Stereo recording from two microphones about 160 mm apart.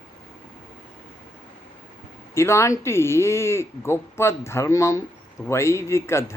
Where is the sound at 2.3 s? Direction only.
15° left (ahead or behind).